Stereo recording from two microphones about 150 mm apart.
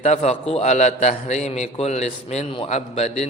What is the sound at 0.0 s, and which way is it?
A man's voice, 50° left (ahead or behind).